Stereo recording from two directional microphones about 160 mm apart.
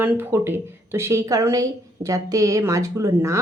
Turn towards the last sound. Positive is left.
turn(degrees=-15)  # may be behind; listen again after turning